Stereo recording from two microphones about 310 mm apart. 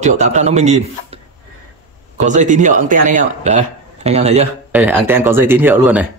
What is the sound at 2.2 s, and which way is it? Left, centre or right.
A man's voice, right.